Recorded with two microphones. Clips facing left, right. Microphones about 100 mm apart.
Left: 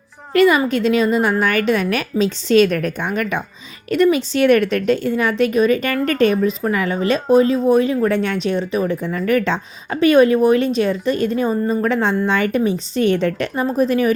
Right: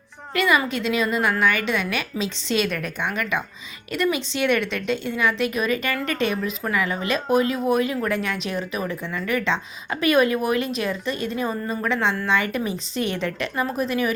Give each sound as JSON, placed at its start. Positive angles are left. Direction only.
{"t": 0.3, "sound": "a woman's voice", "side_deg": 35}